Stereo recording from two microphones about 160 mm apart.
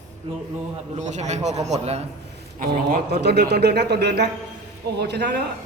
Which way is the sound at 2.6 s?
70° right (ahead or behind).